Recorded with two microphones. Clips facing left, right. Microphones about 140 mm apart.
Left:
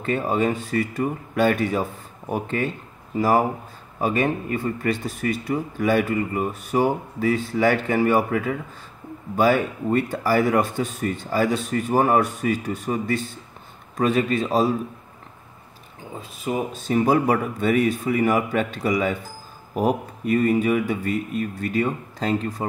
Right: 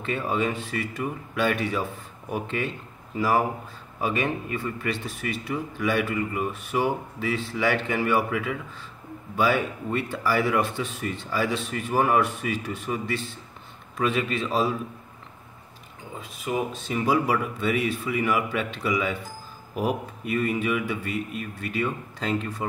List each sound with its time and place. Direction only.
0.0 s speech: 40° left (ahead or behind)
16.8 s speech: 45° left (ahead or behind)